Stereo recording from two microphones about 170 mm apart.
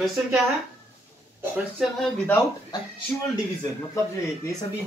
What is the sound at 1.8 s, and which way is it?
Speech, 5° left (ahead or behind).